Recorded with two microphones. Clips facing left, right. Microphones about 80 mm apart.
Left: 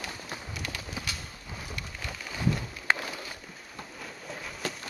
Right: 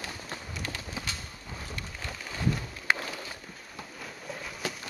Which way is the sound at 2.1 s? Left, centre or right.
Centre.